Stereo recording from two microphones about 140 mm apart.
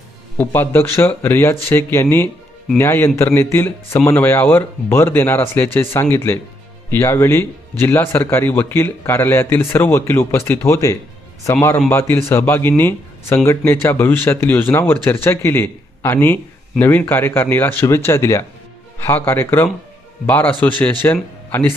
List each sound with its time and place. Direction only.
0.3 s speech: 15° left (ahead or behind)